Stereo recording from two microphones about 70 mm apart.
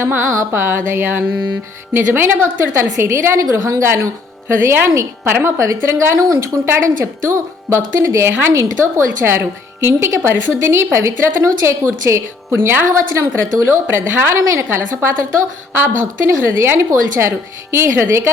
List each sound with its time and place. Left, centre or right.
0.0 s a woman's voice: right
5.5 s a woman's voice: right